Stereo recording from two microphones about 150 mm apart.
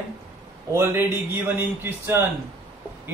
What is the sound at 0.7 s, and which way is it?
A man's voice, 15° right (ahead or behind).